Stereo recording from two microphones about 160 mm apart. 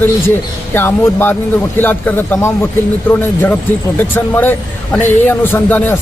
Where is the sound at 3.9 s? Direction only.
10° left (ahead or behind).